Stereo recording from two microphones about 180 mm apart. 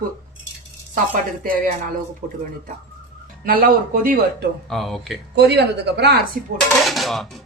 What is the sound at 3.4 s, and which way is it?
Speech, 55° right (ahead or behind).